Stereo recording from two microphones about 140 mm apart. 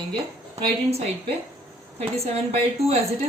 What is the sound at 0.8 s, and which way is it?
A woman's voice, 45° right (ahead or behind).